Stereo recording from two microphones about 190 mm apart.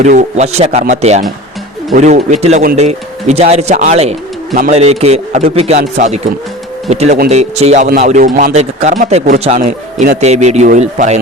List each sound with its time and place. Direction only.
0.0 s speech: 40° right (ahead or behind)